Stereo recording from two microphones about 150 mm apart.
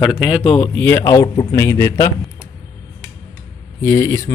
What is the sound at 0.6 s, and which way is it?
Speech, 15° left (ahead or behind).